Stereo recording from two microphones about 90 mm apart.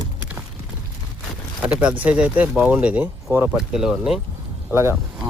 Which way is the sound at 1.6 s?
10° right (ahead or behind).